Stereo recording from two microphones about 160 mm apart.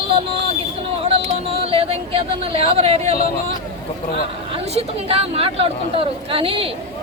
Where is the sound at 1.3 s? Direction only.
35° right (ahead or behind).